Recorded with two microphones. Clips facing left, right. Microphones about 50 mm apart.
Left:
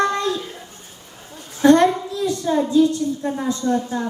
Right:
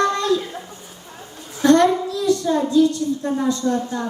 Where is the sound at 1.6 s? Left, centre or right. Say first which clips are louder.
Left 1 dB; centre.